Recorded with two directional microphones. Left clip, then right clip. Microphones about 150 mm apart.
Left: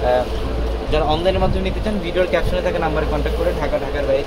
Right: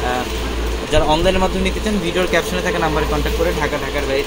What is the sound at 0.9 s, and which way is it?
Speech, 65° right (ahead or behind).